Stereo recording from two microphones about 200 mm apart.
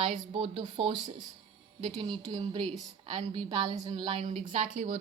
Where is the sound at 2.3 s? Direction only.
25° right (ahead or behind).